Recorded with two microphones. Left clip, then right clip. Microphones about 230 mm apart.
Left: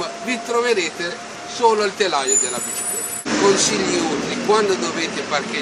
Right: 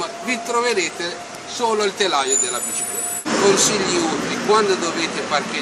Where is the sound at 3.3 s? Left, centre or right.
Right.